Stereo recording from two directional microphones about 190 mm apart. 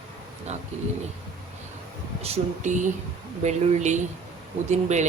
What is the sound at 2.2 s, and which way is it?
Speech, 35° right (ahead or behind).